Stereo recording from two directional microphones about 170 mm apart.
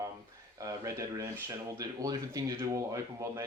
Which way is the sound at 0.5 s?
20° right (ahead or behind).